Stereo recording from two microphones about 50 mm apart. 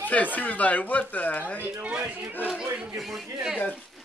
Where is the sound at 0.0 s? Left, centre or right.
Left.